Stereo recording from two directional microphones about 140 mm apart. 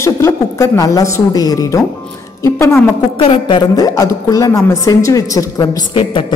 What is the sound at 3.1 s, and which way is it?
Speech, 40° left (ahead or behind).